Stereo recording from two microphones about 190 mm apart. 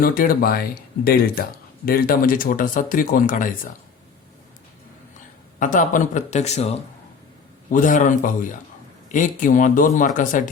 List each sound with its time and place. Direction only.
0.0 s speech: 50° left (ahead or behind)
5.5 s speech: 45° left (ahead or behind)